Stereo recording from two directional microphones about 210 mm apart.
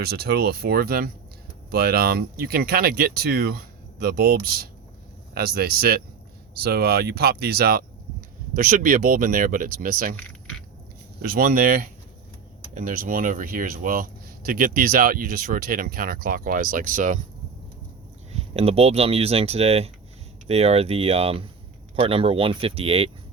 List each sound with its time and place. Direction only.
0.0 s speech: 50° right (ahead or behind)
11.2 s speech: 45° right (ahead or behind)
18.3 s speech: 30° right (ahead or behind)